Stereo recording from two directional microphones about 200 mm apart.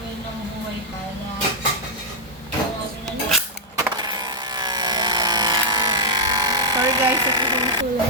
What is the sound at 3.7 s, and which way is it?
Vehicle, 20° right (ahead or behind).